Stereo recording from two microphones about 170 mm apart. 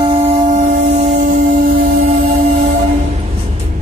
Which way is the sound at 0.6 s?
45° right (ahead or behind).